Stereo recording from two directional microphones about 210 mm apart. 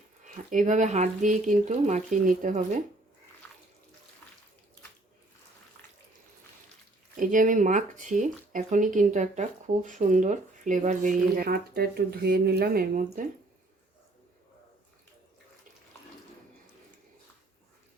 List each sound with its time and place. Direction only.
0.3 s speech: 35° right (ahead or behind)
7.2 s speech: 40° right (ahead or behind)